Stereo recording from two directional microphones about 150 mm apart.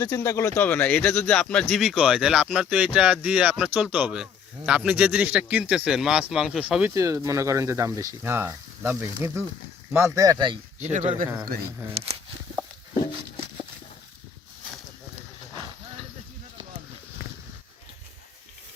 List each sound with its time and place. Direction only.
0.0 s speech: 25° left (ahead or behind); by 6.9 s 5° right (ahead or behind)
6.9 s speech: 20° right (ahead or behind)
10.8 s speech: 50° right (ahead or behind)